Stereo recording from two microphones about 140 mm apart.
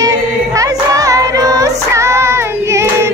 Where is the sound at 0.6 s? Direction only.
25° right (ahead or behind).